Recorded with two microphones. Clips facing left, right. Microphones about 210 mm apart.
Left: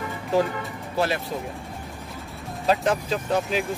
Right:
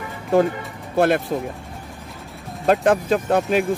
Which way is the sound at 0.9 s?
55° right (ahead or behind).